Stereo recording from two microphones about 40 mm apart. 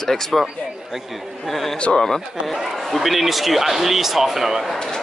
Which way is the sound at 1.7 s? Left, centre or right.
Left.